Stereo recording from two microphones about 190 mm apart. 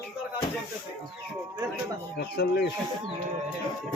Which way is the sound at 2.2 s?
60° left (ahead or behind).